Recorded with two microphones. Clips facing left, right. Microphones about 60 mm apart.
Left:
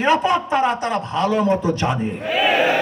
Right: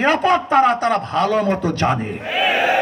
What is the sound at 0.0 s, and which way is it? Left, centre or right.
Speech, right.